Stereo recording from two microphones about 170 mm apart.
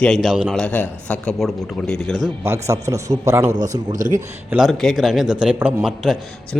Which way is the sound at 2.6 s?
15° right (ahead or behind).